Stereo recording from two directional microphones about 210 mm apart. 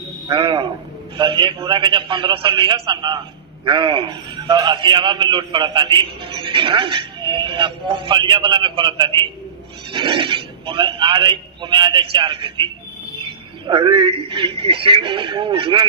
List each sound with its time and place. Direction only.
0.3 s a man's voice: 25° right (ahead or behind)
13.2 s bird: 25° right (ahead or behind)
14.3 s a man's voice: 25° right (ahead or behind)